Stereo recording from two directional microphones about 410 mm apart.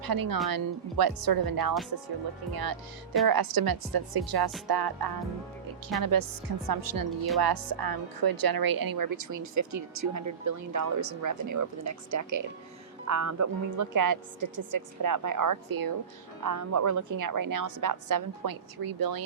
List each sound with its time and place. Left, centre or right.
0.0 s a woman's voice: right